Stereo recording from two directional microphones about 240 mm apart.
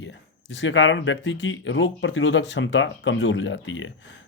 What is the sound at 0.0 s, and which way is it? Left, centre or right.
Speech, left.